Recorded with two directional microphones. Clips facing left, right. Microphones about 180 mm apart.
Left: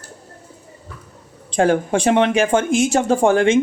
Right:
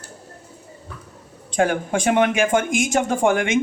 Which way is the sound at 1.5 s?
30° left (ahead or behind).